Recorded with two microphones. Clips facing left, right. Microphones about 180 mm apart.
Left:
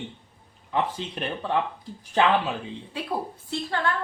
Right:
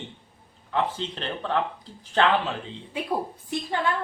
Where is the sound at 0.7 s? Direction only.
15° left (ahead or behind).